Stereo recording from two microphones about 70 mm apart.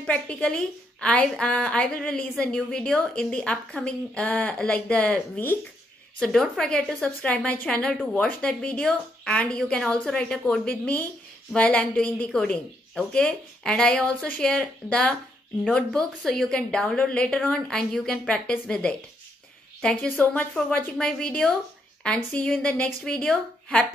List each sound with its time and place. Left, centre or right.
0.0 s speech: centre
7.0 s a woman's voice: centre
20.1 s a woman's voice: left
21.0 s speech: centre